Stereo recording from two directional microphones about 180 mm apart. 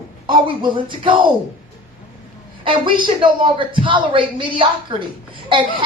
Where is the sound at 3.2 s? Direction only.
30° right (ahead or behind).